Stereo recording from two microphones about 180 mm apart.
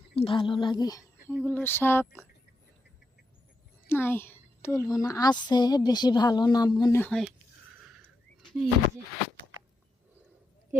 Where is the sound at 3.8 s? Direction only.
10° left (ahead or behind).